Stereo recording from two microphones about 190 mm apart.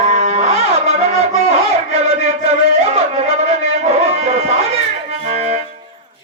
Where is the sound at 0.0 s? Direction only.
35° right (ahead or behind).